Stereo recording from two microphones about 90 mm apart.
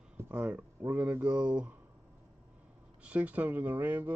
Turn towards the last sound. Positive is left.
turn(degrees=-20)  # may be behind; listen again after turning